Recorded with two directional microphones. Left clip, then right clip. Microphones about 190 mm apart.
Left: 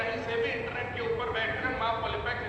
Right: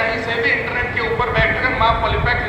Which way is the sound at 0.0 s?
25° right (ahead or behind).